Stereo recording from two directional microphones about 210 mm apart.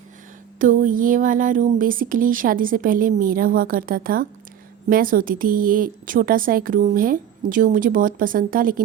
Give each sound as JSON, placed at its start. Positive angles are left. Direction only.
{"t": 0.6, "sound": "a woman's voice", "side_deg": -40}